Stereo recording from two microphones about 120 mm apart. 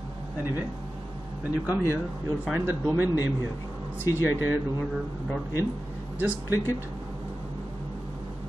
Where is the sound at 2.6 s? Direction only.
20° right (ahead or behind).